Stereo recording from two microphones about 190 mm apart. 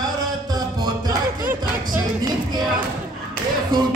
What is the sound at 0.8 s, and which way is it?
Music, 15° right (ahead or behind).